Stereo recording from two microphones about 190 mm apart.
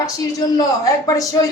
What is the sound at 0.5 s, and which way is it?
Speech, 20° left (ahead or behind).